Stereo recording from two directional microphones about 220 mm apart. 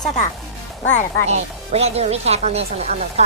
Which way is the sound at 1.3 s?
30° right (ahead or behind).